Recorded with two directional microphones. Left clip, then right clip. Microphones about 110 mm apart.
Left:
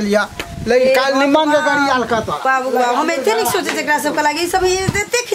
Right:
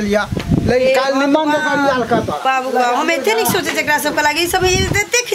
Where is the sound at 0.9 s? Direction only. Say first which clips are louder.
Left 1 dB; 30° left (ahead or behind); by 2.2 s 45° left (ahead or behind).